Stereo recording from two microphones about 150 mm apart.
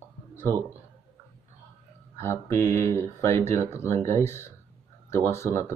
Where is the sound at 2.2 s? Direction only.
20° left (ahead or behind).